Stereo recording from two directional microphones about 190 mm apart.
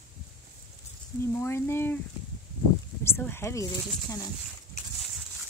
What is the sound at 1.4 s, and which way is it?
Speech, 10° left (ahead or behind).